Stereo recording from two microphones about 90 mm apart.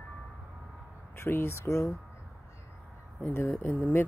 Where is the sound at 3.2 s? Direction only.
25° left (ahead or behind).